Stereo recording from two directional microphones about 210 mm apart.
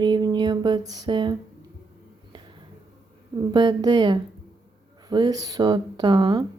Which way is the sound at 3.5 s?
20° right (ahead or behind).